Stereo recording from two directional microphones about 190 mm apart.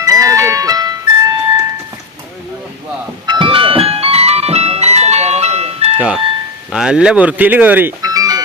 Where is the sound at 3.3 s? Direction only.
25° right (ahead or behind).